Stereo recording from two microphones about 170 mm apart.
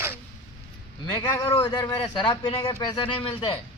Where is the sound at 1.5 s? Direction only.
30° left (ahead or behind).